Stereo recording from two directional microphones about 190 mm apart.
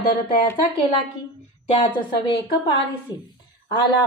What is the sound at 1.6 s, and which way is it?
Speech, 30° left (ahead or behind).